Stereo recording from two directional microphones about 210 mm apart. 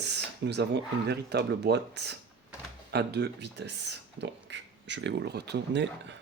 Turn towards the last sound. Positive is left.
turn(degrees=-55)  # may be behind; listen again after turning